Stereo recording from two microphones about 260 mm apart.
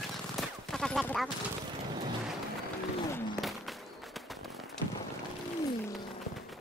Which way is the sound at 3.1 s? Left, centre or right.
Centre.